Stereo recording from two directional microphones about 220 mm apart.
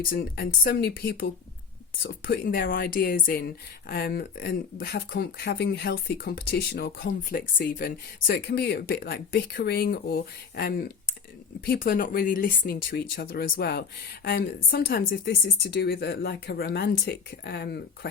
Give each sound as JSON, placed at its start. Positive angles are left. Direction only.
{"t": 0.1, "sound": "speech", "side_deg": 45}